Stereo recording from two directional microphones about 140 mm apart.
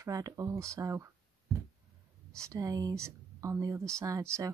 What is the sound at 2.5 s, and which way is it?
Speech, 25° right (ahead or behind).